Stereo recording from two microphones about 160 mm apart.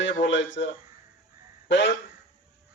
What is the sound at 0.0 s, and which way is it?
A man's voice, 90° left.